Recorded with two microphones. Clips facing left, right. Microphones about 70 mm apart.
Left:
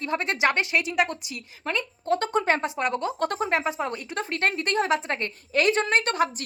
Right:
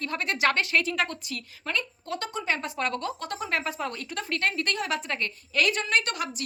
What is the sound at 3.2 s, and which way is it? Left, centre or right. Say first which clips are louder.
Speech: left 8 dB; left.